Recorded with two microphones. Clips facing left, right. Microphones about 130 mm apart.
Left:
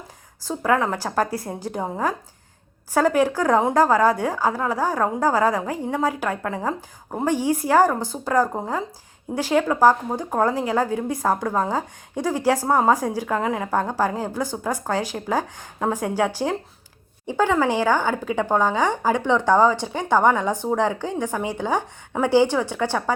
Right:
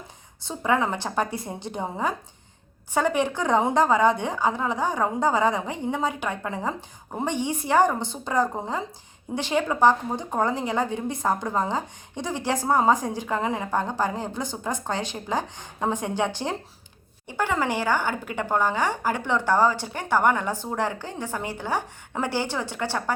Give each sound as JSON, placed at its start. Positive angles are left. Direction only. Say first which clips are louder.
{"t": 0.4, "sound": "a woman's voice", "louder": "left 3 dB", "side_deg": 0}